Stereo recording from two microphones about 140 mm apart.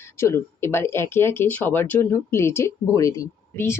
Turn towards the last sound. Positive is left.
turn(degrees=20)  # may be behind; listen again after turning